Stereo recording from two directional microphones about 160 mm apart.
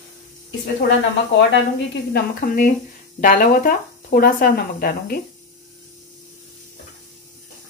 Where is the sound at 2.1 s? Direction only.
65° left (ahead or behind).